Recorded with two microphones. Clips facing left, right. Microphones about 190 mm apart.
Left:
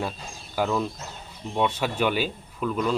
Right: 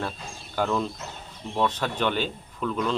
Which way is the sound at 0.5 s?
5° left (ahead or behind).